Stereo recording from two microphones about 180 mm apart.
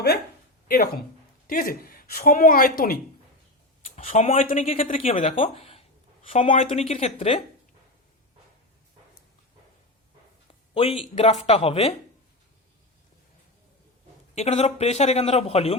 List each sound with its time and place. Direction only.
0.7 s a woman's voice: 55° left (ahead or behind)
3.8 s a woman's voice: 45° left (ahead or behind)
4.6 s speech: 35° left (ahead or behind)
10.8 s speech: 30° left (ahead or behind)
14.3 s speech: 35° left (ahead or behind)